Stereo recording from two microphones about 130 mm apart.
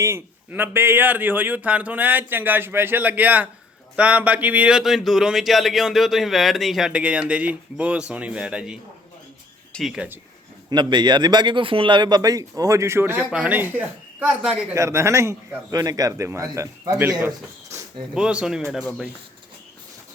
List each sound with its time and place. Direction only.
0.0 s speech: 20° right (ahead or behind); by 10.1 s 5° right (ahead or behind)
10.7 s a man's voice: 35° right (ahead or behind); by 14.8 s 10° right (ahead or behind)
14.8 s a man's voice: 20° right (ahead or behind)
17.2 s bird: 20° right (ahead or behind)
18.1 s speech: 5° right (ahead or behind)